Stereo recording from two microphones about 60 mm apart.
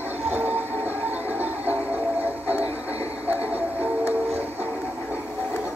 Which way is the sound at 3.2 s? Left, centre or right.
Right.